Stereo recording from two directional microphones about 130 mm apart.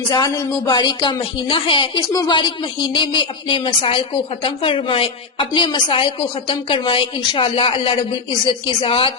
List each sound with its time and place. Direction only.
0.1 s a woman's voice: 30° left (ahead or behind)